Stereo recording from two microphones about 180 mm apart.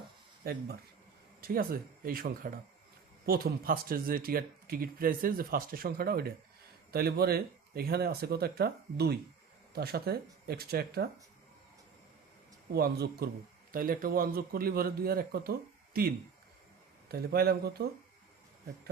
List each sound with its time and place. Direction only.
0.4 s speech: 60° right (ahead or behind)
12.7 s speech: 60° right (ahead or behind)